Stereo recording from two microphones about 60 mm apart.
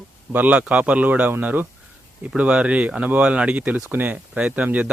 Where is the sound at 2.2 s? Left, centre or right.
Centre.